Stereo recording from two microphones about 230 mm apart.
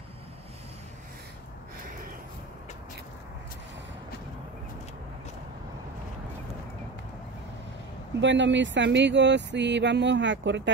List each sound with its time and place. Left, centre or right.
8.2 s speech: right